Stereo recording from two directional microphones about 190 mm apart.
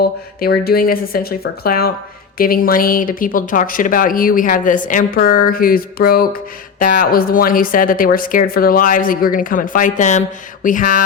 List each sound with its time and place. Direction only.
0.0 s speech: 55° left (ahead or behind)